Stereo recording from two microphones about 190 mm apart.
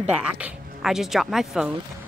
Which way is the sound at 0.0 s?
5° right (ahead or behind).